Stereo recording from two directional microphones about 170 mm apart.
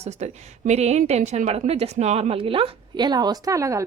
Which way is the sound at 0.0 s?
40° right (ahead or behind).